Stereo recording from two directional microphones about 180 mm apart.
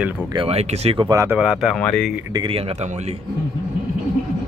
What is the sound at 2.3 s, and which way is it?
Speech, 30° right (ahead or behind).